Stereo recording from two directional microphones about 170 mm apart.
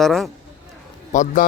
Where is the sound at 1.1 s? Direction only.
50° left (ahead or behind).